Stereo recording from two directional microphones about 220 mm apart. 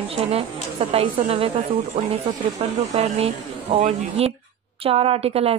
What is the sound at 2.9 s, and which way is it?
Speech, 30° right (ahead or behind).